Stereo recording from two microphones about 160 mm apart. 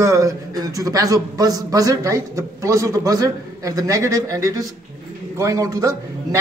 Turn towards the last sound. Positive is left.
turn(degrees=-20)  # may be behind; listen again after turning